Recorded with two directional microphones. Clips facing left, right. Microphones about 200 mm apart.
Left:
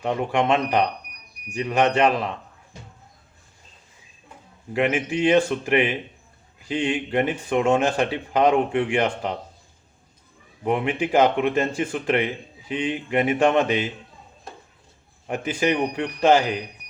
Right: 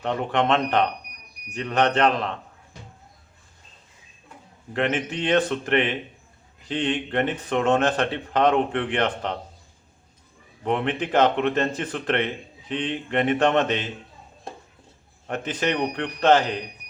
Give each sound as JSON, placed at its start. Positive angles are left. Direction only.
{"t": 0.0, "sound": "speech", "side_deg": 10}
{"t": 4.7, "sound": "speech", "side_deg": 10}
{"t": 10.6, "sound": "speech", "side_deg": 10}
{"t": 15.3, "sound": "speech", "side_deg": 10}